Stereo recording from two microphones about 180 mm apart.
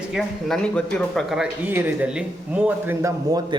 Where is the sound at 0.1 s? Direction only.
Centre (ahead or behind).